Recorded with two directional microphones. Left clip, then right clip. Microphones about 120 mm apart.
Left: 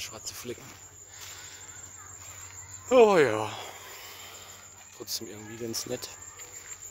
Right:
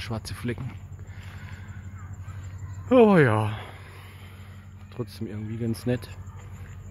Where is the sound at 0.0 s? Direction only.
Centre (ahead or behind).